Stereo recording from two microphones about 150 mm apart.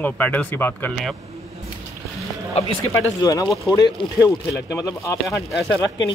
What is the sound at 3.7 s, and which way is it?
Speech, 20° left (ahead or behind).